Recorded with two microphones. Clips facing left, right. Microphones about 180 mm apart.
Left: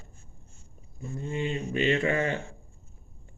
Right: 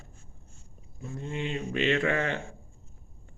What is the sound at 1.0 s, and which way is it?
A man's voice, 5° left (ahead or behind).